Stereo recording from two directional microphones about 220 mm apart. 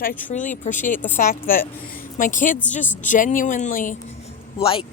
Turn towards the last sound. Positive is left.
turn(degrees=25)  # may be behind; listen again after turning